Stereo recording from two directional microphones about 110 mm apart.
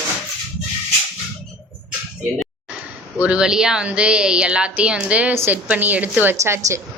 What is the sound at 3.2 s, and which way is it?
A woman's voice, 10° right (ahead or behind).